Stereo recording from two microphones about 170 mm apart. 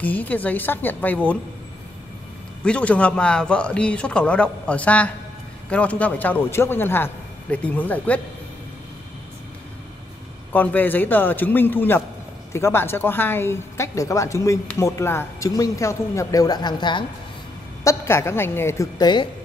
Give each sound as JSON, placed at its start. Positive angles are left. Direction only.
{"t": 0.0, "sound": "a man's voice", "side_deg": 10}
{"t": 2.6, "sound": "a man's voice", "side_deg": 5}
{"t": 10.5, "sound": "a man's voice", "side_deg": 10}
{"t": 17.8, "sound": "a man's voice", "side_deg": 15}